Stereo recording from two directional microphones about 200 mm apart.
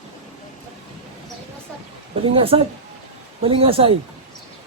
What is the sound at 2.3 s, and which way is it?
Speech, 30° right (ahead or behind).